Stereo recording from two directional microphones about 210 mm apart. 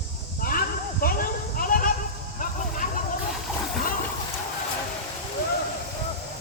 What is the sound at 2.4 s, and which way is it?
Music, 40° left (ahead or behind).